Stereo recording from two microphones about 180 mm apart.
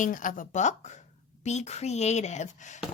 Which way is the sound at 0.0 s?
45° left (ahead or behind).